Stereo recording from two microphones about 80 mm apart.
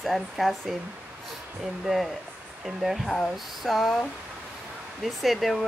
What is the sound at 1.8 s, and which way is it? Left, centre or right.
Speech, centre.